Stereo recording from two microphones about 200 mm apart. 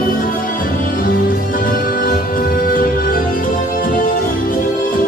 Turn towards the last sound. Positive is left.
turn(degrees=45)  # may be behind; listen again after turning